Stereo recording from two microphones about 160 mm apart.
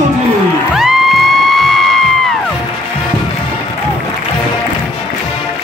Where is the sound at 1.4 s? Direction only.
Centre (ahead or behind).